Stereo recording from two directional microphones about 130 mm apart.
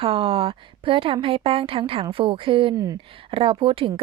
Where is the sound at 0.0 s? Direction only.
45° right (ahead or behind).